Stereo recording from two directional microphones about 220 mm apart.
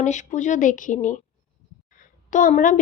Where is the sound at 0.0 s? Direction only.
35° left (ahead or behind).